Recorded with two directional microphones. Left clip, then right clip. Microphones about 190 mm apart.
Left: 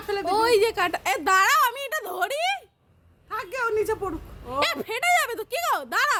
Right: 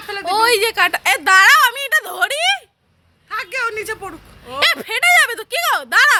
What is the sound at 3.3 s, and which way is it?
Speech, 35° left (ahead or behind).